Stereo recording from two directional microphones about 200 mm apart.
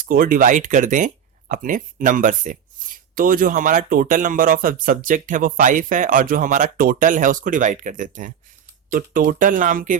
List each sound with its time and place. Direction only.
0.0 s speech: 45° right (ahead or behind)